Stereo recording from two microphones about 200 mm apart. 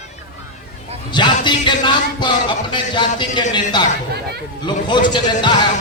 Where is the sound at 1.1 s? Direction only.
25° left (ahead or behind).